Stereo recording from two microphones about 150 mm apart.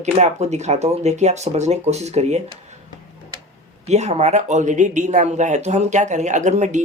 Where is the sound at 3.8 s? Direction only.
50° right (ahead or behind).